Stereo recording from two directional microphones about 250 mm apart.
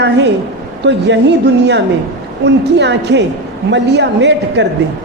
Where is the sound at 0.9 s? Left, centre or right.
Right.